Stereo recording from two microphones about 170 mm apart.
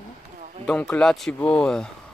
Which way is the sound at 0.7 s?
5° left (ahead or behind).